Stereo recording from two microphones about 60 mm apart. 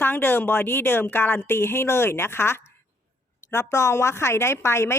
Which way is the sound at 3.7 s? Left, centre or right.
Left.